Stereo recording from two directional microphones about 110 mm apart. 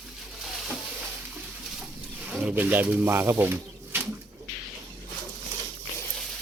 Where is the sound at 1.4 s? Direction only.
15° right (ahead or behind).